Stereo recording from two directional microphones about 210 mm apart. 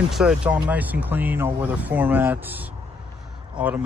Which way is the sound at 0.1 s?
5° right (ahead or behind).